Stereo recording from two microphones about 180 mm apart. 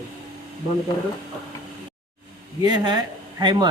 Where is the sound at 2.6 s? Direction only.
20° right (ahead or behind).